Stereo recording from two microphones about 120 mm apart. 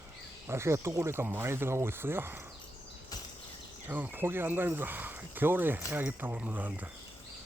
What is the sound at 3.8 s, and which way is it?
Speech, 15° right (ahead or behind).